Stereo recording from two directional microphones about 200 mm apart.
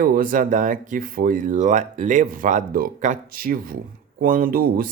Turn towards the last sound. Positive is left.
turn(degrees=-45)  # may be behind; listen again after turning